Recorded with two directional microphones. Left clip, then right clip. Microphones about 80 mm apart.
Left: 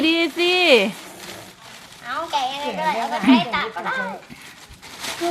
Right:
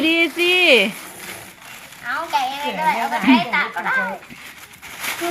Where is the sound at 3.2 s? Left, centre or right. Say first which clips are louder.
Right 1 dB; left.